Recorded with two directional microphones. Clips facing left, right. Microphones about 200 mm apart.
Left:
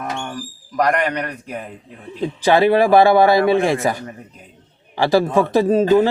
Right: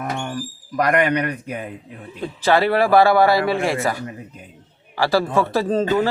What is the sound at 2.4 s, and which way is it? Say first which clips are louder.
A man's voice: left 3 dB; 15° left (ahead or behind).